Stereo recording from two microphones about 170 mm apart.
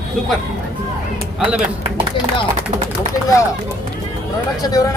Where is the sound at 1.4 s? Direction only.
5° right (ahead or behind).